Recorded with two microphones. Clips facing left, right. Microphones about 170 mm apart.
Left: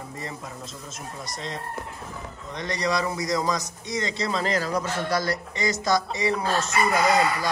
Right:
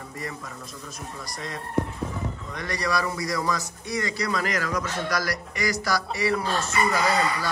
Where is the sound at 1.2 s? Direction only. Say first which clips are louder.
Left 2 dB; 20° left (ahead or behind).